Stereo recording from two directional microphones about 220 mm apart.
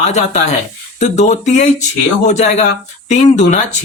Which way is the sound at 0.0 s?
30° left (ahead or behind).